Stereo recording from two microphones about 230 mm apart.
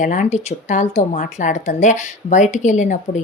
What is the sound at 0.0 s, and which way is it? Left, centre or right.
Speech, left.